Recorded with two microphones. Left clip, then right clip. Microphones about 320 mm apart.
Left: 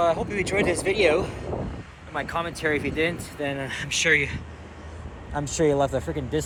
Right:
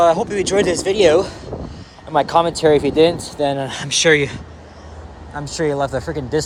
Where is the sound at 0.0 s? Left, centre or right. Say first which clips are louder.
Right 9 dB; centre.